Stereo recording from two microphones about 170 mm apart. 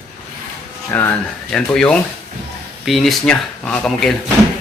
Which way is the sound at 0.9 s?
10° left (ahead or behind).